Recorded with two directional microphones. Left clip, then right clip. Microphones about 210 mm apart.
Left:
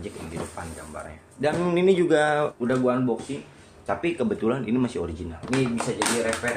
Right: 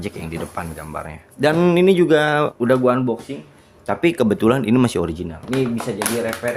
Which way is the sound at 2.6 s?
60° right (ahead or behind).